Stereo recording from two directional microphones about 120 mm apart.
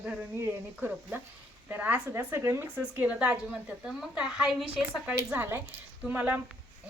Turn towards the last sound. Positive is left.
turn(degrees=-10)  # may be behind; listen again after turning